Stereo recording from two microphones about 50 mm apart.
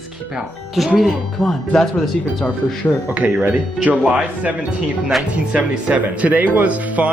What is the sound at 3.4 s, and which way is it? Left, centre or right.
Speech, right.